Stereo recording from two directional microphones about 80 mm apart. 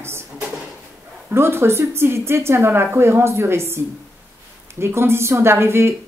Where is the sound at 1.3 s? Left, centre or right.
Right.